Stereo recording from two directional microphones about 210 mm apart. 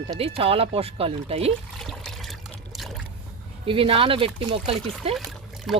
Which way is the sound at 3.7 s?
25° right (ahead or behind).